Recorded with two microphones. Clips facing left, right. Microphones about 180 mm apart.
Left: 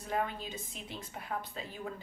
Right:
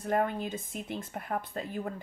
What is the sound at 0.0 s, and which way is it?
Speech, 50° right (ahead or behind).